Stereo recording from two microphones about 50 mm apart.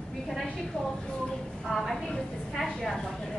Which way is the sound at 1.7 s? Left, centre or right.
Centre.